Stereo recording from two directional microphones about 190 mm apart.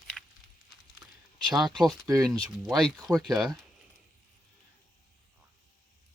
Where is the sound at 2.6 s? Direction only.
Centre (ahead or behind).